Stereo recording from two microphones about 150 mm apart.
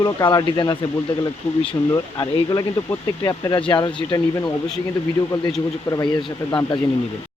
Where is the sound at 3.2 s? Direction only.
25° left (ahead or behind).